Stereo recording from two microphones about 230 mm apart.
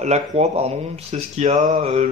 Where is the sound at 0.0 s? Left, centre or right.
Right.